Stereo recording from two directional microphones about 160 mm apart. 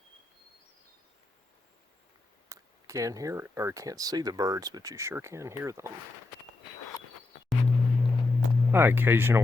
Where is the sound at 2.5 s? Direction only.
20° right (ahead or behind).